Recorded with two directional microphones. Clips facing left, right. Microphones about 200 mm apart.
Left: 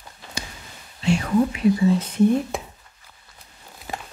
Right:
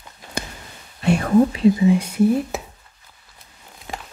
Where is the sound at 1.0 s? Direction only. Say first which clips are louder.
Right 4 dB; 50° right (ahead or behind).